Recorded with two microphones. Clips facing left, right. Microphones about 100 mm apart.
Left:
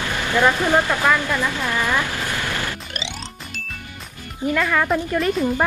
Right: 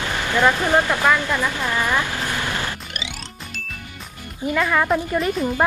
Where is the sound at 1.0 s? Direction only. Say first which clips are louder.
Even; 15° right (ahead or behind).